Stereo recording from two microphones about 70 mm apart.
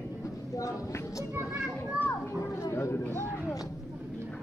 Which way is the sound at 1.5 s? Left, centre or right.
Centre.